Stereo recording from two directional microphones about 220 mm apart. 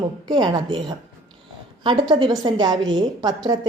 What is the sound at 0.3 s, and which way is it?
A woman's voice, 20° right (ahead or behind).